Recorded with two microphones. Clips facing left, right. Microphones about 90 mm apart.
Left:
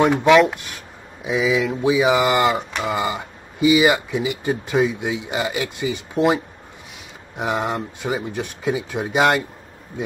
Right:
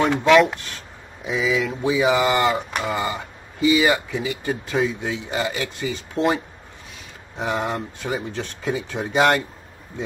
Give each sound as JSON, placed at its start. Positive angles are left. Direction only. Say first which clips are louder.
{"t": 0.0, "sound": "speech", "louder": "left 2 dB", "side_deg": 15}
{"t": 0.7, "sound": "a sound", "louder": "left 1 dB", "side_deg": 15}
{"t": 1.7, "sound": "speech", "louder": "left 2 dB", "side_deg": 15}